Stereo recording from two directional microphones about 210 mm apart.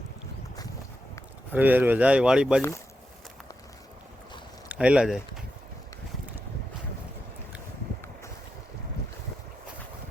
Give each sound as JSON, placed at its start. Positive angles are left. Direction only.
{"t": 1.5, "sound": "speech", "side_deg": -10}
{"t": 2.6, "sound": "speech", "side_deg": 15}
{"t": 4.7, "sound": "speech", "side_deg": -5}